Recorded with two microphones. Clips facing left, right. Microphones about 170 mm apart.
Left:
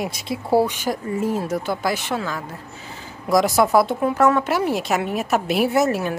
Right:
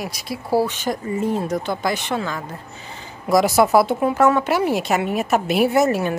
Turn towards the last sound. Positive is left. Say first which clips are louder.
# right 2 dB
turn(degrees=0)  # may be behind; listen again after turning